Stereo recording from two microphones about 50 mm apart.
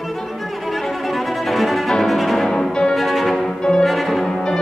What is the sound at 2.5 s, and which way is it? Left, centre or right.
Music, centre.